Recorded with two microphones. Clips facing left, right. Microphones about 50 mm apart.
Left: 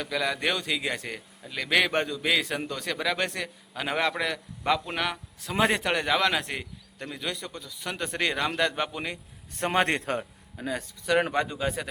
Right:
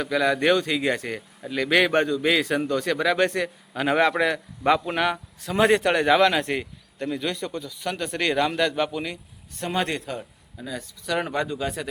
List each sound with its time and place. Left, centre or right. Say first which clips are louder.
0.0 s a man's voice: right 6 dB; centre
9.6 s a man's voice: left 1 dB; left
10.6 s speech: left 2 dB; left
11.0 s speech: left 1 dB; left